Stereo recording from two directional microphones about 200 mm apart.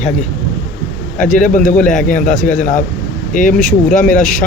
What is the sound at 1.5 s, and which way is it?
Speech, 40° left (ahead or behind).